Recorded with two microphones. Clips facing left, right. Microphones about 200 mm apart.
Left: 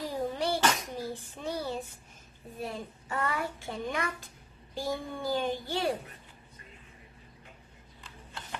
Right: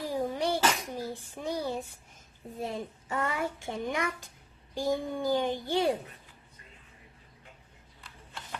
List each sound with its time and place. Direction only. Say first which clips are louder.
0.0 s cough: right 1 dB; 15° right (ahead or behind)
1.4 s a sound: right 2 dB; 15° right (ahead or behind)
2.6 s a child's voice: right 2 dB; 20° right (ahead or behind)